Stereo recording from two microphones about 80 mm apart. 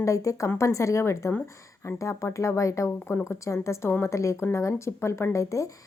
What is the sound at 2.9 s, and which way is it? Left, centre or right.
Speech, left.